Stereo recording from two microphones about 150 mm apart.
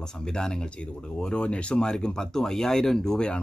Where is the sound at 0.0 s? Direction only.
5° left (ahead or behind).